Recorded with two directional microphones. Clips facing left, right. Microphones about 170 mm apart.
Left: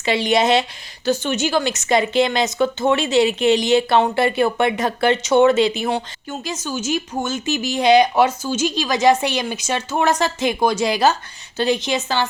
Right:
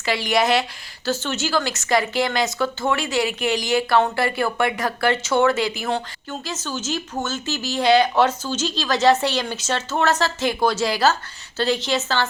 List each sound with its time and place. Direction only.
0.0 s a woman's voice: 20° left (ahead or behind)